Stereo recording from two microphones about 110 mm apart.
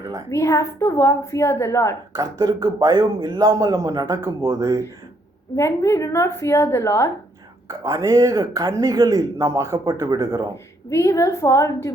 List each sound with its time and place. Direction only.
0.3 s a woman's voice: 30° left (ahead or behind)
2.1 s speech: 30° right (ahead or behind)
5.5 s a woman's voice: 25° left (ahead or behind)
7.7 s speech: 30° right (ahead or behind)
10.8 s a woman's voice: 25° left (ahead or behind)